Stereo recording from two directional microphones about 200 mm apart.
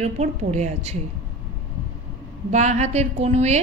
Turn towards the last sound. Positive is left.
turn(degrees=-35)  # may be behind; listen again after turning